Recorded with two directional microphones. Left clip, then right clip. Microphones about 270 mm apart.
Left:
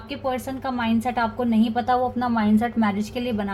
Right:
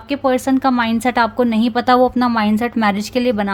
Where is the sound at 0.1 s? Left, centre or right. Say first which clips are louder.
Right 11 dB; right.